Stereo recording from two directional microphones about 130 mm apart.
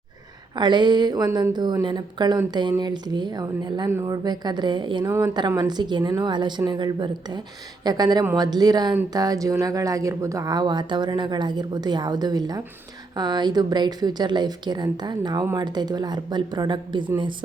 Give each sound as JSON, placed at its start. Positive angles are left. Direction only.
{"t": 0.5, "sound": "speech", "side_deg": -35}